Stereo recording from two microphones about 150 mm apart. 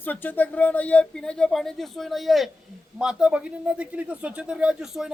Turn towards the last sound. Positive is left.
turn(degrees=-5)  # may be behind; listen again after turning